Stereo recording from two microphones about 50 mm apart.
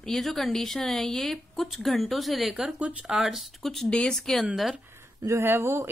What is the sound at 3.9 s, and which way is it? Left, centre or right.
Speech, centre.